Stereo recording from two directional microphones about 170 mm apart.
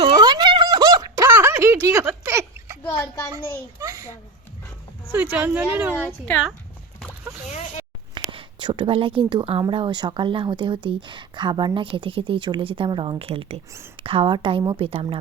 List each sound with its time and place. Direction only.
0.0 s a sound: 25° right (ahead or behind)
3.3 s speech: 20° right (ahead or behind)
5.1 s a woman's voice: 10° right (ahead or behind)
6.2 s speech: 5° left (ahead or behind)
8.1 s a woman's voice: 30° right (ahead or behind)